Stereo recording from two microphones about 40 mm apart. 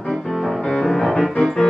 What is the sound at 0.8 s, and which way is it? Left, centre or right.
Music, centre.